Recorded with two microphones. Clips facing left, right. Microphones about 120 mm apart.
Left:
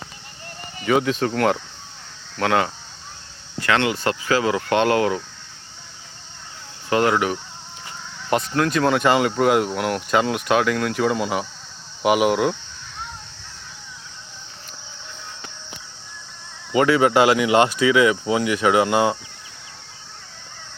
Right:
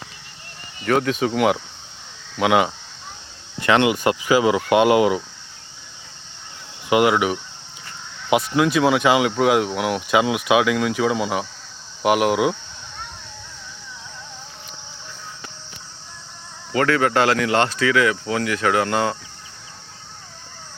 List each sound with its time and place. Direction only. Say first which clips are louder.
0.8 s speech: even; centre (ahead or behind); by 5.2 s 15° right (ahead or behind)
6.9 s speech: right 2 dB; 10° right (ahead or behind)
16.7 s speech: left 2 dB; 15° left (ahead or behind)